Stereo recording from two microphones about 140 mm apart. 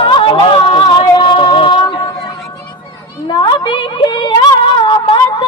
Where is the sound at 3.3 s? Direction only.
35° left (ahead or behind).